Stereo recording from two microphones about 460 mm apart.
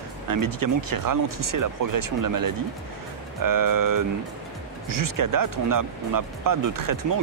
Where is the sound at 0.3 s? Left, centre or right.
Right.